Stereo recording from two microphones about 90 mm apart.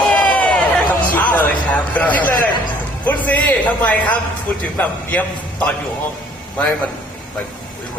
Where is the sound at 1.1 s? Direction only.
15° left (ahead or behind).